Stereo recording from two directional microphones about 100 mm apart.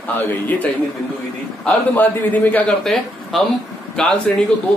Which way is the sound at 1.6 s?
15° left (ahead or behind).